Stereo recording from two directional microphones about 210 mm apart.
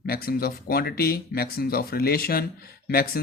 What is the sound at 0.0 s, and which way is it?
Speech, 45° left (ahead or behind).